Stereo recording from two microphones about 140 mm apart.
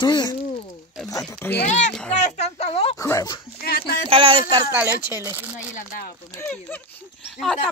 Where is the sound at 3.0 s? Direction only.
20° left (ahead or behind).